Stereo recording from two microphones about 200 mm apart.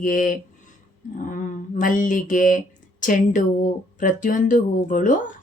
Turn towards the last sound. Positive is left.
turn(degrees=40)  # may be behind; listen again after turning